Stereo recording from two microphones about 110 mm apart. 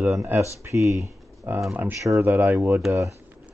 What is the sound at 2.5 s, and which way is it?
Speech, 25° right (ahead or behind).